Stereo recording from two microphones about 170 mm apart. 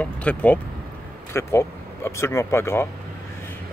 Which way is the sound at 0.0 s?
10° left (ahead or behind).